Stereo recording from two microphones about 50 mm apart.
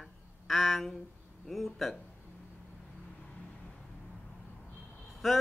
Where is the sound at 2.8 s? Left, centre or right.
Centre.